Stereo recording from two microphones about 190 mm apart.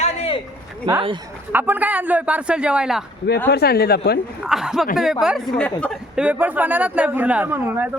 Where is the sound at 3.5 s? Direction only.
55° left (ahead or behind).